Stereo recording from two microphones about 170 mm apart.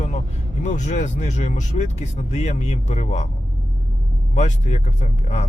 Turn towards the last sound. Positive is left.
turn(degrees=40)  # may be behind; listen again after turning